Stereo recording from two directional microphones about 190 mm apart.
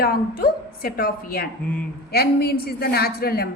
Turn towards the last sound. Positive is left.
turn(degrees=55)  # may be behind; listen again after turning